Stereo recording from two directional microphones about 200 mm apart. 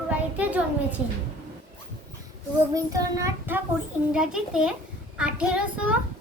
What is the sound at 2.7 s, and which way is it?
A child's voice, 15° right (ahead or behind).